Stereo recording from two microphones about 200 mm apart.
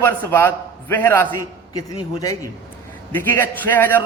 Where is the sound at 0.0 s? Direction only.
10° left (ahead or behind).